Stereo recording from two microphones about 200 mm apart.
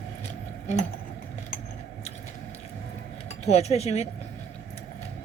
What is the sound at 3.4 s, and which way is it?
Speech, 30° left (ahead or behind).